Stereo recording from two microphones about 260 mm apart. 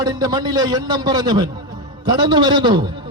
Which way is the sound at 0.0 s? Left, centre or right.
Centre.